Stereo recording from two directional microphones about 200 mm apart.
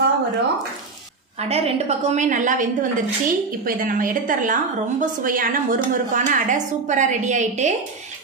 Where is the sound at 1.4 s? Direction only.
30° right (ahead or behind).